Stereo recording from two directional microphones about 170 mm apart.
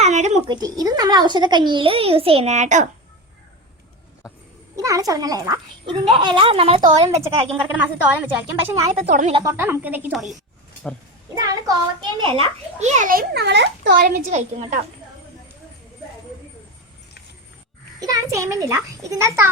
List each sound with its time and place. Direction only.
0.0 s a sound: 40° right (ahead or behind)
0.4 s speech: 25° right (ahead or behind); by 2.9 s 45° right (ahead or behind)
4.8 s speech: 20° right (ahead or behind)
7.2 s a woman's voice: 15° right (ahead or behind)
11.3 s speech: 20° right (ahead or behind)
12.4 s a child's voice: 40° right (ahead or behind); by 14.1 s 75° right (ahead or behind)
14.3 s a woman's voice: 45° right (ahead or behind)
18.0 s a woman's voice: 20° right (ahead or behind)